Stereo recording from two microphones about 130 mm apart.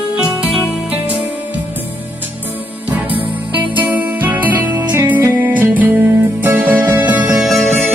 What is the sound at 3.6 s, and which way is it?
Music, 10° right (ahead or behind).